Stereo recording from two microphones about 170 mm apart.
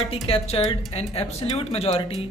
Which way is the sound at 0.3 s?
35° left (ahead or behind).